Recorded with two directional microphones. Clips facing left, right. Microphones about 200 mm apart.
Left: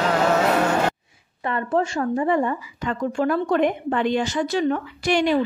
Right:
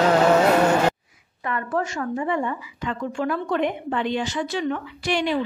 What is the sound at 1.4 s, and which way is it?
A woman's voice, 30° left (ahead or behind).